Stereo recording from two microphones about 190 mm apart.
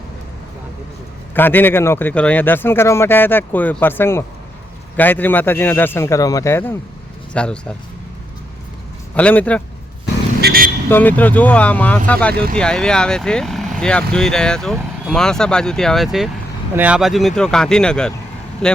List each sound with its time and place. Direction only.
1.3 s a man's voice: 10° left (ahead or behind)
9.1 s a man's voice: 5° left (ahead or behind)
10.4 s speech: 50° right (ahead or behind)
10.8 s a man's voice: 10° left (ahead or behind)
12.3 s speech: 55° right (ahead or behind)
12.5 s speech: 5° left (ahead or behind)